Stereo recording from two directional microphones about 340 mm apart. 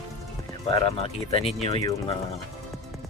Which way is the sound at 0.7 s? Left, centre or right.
Centre.